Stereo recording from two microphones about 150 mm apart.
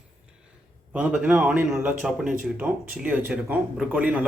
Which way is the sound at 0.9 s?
5° right (ahead or behind).